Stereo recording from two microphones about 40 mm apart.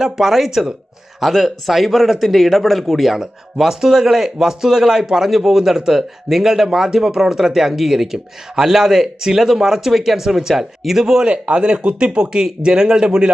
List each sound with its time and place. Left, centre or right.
0.0 s a man's voice: centre
3.2 s a man's voice: centre
11.3 s speech: right